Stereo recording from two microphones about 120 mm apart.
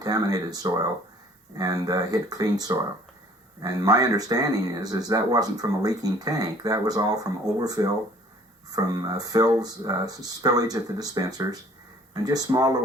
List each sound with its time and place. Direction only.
0.0 s speech: 30° right (ahead or behind)